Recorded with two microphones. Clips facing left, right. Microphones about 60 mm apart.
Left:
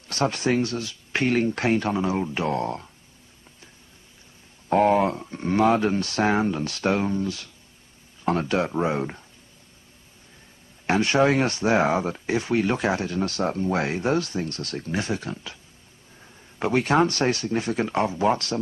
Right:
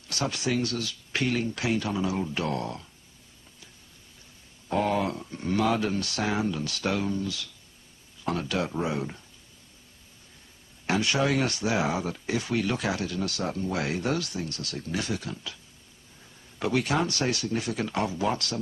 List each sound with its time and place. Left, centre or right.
0.1 s speech: left
4.6 s speech: left
10.9 s speech: left